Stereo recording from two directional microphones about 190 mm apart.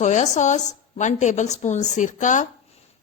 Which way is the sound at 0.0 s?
40° left (ahead or behind).